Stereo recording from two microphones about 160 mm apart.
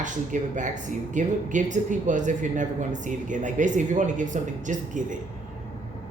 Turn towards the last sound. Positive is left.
turn(degrees=-50)  # may be behind; listen again after turning